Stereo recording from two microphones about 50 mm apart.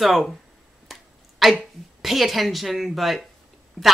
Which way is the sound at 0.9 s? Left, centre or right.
Centre.